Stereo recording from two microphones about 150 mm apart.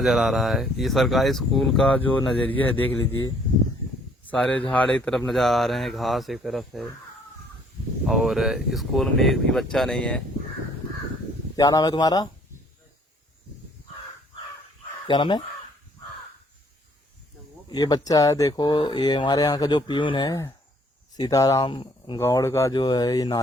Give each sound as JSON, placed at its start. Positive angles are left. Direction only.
{"t": 0.0, "sound": "speech", "side_deg": 0}
{"t": 4.3, "sound": "speech", "side_deg": 5}
{"t": 8.0, "sound": "speech", "side_deg": 0}
{"t": 11.5, "sound": "speech", "side_deg": 25}
{"t": 15.0, "sound": "speech", "side_deg": 30}
{"t": 17.7, "sound": "speech", "side_deg": 25}
{"t": 22.2, "sound": "speech", "side_deg": 20}